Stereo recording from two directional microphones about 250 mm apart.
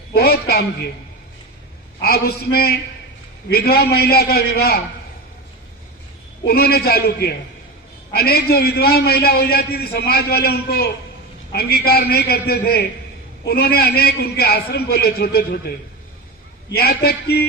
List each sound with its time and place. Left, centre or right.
0.1 s a man's voice: left
2.0 s a man's voice: left
6.4 s a man's voice: left
16.7 s a man's voice: left